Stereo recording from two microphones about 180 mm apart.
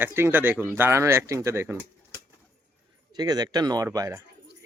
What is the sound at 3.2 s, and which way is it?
Speech, 20° right (ahead or behind).